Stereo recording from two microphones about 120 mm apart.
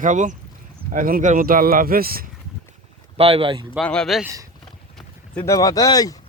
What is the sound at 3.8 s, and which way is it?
Speech, 5° left (ahead or behind).